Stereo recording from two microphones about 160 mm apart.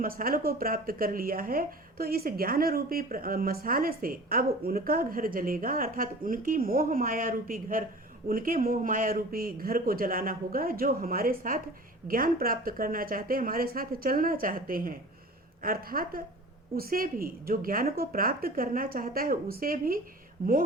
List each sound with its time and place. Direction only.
0.0 s speech: 65° right (ahead or behind)